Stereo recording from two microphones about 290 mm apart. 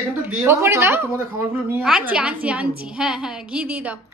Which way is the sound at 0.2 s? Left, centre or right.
Centre.